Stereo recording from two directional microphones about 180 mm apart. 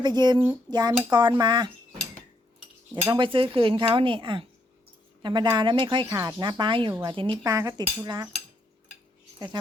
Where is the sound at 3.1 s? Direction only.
30° right (ahead or behind).